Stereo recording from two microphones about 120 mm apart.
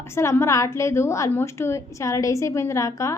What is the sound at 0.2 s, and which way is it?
A woman's voice, 25° left (ahead or behind).